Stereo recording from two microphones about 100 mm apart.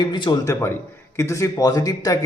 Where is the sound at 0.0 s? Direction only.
50° left (ahead or behind).